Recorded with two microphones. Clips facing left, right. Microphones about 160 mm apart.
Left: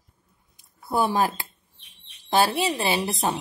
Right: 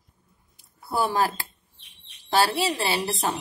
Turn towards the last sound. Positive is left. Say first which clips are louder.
# left 1 dB
turn(degrees=20)  # may be behind; listen again after turning